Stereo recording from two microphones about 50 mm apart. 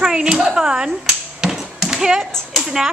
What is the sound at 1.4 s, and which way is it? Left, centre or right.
Tap, centre.